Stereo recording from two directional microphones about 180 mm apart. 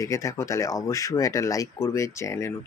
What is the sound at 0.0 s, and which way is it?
Speech, 15° left (ahead or behind).